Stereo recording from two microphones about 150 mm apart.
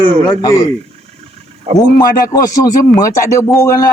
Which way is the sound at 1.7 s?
40° right (ahead or behind).